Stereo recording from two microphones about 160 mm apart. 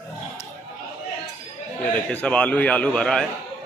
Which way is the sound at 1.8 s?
10° left (ahead or behind).